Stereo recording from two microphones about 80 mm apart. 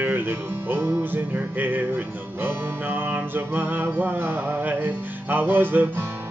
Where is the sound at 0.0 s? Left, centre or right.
Right.